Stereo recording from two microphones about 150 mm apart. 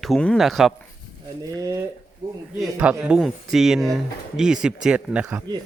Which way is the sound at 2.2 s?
25° right (ahead or behind).